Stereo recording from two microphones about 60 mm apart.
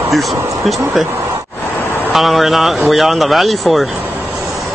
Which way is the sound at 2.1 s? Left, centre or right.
Centre.